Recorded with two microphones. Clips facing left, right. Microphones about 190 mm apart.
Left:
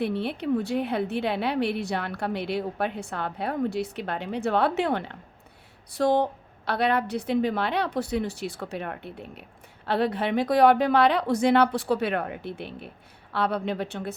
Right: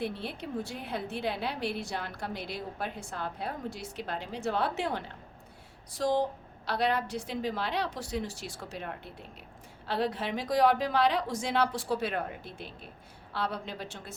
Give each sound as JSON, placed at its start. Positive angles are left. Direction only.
{"t": 0.0, "sound": "a woman's voice", "side_deg": 65}